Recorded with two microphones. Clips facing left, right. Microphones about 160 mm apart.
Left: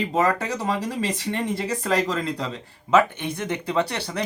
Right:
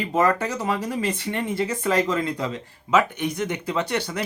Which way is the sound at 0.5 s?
35° left (ahead or behind).